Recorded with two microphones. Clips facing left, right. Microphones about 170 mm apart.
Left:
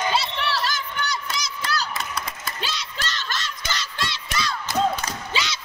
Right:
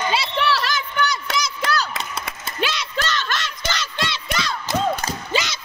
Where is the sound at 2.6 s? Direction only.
65° right (ahead or behind).